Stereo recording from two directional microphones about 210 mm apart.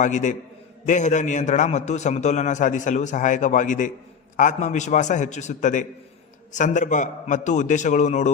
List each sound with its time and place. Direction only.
0.0 s a man's voice: 35° left (ahead or behind)